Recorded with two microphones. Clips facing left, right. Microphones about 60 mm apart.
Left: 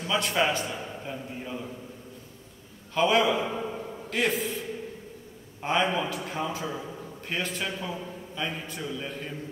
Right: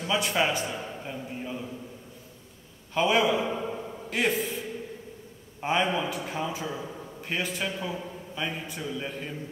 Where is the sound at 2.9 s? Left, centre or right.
Centre.